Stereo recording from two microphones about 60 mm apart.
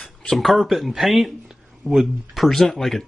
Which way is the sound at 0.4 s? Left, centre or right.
Centre.